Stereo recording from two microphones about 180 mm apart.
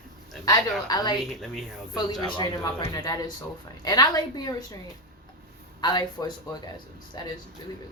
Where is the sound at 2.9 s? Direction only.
20° left (ahead or behind).